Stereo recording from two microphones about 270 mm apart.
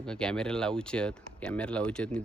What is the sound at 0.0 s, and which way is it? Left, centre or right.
Speech, centre.